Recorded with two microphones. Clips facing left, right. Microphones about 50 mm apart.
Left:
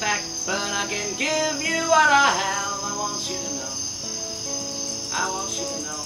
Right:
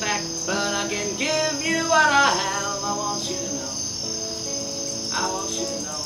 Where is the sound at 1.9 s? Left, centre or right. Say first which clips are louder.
Left 1 dB; centre.